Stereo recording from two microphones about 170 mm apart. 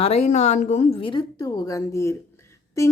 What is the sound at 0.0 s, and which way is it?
A woman's voice, 40° left (ahead or behind).